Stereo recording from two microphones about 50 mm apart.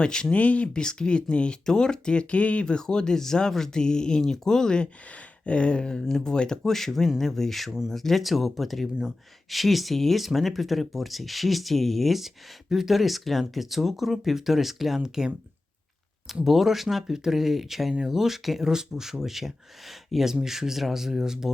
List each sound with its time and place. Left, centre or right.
0.0 s speech: centre
5.5 s a sound: left
6.1 s speech: centre
16.3 s speech: centre